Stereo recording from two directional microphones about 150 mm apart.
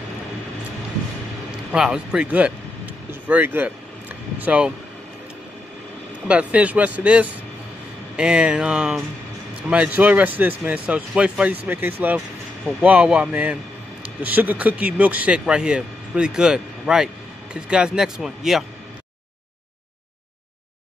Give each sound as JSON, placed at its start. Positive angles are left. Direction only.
{"t": 1.7, "sound": "speech", "side_deg": -5}
{"t": 6.2, "sound": "speech", "side_deg": -10}